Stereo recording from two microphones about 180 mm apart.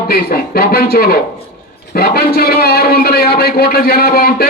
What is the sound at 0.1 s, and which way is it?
A man's voice, 55° left (ahead or behind).